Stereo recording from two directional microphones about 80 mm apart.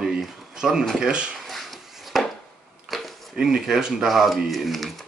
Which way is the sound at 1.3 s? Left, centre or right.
Centre.